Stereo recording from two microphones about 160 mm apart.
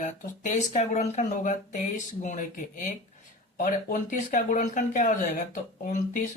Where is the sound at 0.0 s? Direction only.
50° left (ahead or behind).